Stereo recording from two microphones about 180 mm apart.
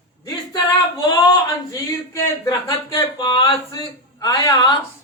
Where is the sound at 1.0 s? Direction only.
20° left (ahead or behind).